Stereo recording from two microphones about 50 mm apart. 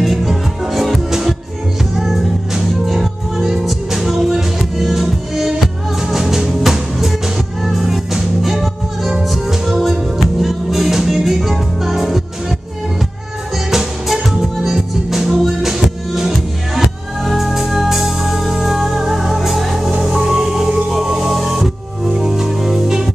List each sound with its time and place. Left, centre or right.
0.0 s music: centre
13.7 s music: centre